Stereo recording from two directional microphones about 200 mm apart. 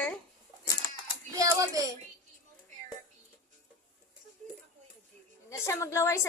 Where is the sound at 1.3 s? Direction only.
15° right (ahead or behind).